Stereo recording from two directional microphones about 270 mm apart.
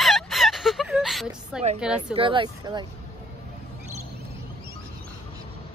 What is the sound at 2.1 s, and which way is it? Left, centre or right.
Speech, centre.